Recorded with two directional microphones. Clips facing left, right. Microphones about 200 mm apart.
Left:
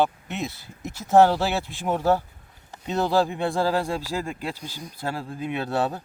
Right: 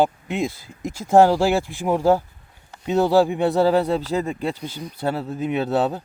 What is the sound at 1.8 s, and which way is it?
Speech, 15° right (ahead or behind).